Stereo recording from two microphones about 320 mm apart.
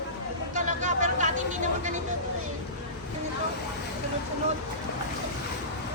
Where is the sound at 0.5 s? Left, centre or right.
Right.